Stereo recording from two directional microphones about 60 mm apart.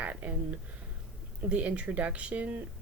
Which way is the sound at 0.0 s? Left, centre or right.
Right.